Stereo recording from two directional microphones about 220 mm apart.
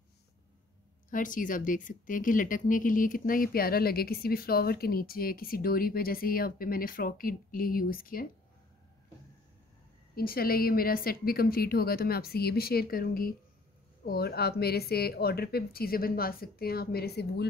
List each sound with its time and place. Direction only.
1.1 s speech: 35° left (ahead or behind)
10.1 s speech: 40° left (ahead or behind)